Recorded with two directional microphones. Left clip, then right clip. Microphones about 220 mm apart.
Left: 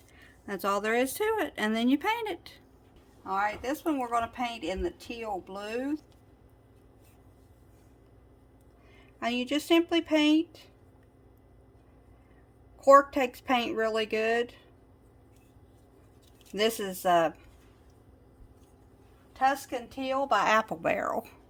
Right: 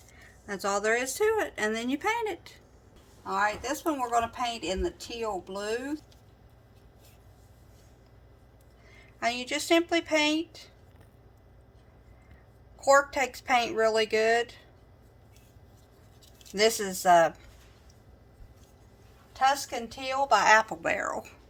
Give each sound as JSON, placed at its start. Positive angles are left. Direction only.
{"t": 0.2, "sound": "speech", "side_deg": 50}
{"t": 3.2, "sound": "speech", "side_deg": 30}
{"t": 9.0, "sound": "speech", "side_deg": 40}
{"t": 12.8, "sound": "speech", "side_deg": 40}
{"t": 16.6, "sound": "speech", "side_deg": 35}
{"t": 19.4, "sound": "speech", "side_deg": 35}